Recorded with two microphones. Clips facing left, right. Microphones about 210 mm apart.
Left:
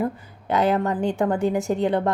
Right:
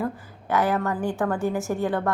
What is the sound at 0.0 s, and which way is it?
A woman's voice, 20° left (ahead or behind).